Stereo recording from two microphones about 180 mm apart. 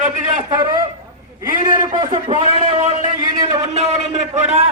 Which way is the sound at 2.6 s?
40° right (ahead or behind).